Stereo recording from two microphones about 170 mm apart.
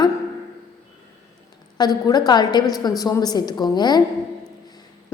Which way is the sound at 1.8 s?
25° left (ahead or behind).